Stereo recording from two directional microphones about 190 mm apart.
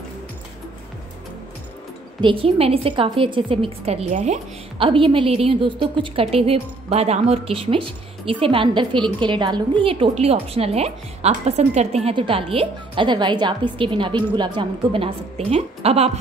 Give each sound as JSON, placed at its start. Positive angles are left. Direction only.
{"t": 2.2, "sound": "a woman's voice", "side_deg": -30}